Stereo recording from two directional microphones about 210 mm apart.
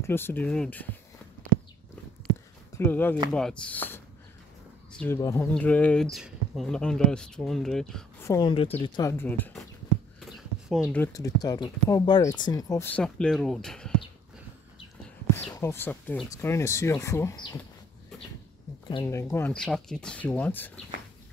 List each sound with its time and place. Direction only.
0.0 s speech: 10° left (ahead or behind)
2.8 s speech: 10° left (ahead or behind)
8.3 s a woman's voice: 20° left (ahead or behind)
9.2 s speech: 5° left (ahead or behind)
15.3 s speech: 10° left (ahead or behind)
19.0 s speech: 10° left (ahead or behind)